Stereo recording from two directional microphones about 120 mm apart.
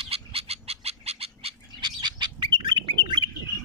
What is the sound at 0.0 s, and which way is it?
Frog, 55° right (ahead or behind).